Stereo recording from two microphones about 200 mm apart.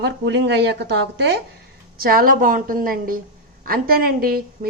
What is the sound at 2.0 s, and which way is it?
Speech, 45° right (ahead or behind).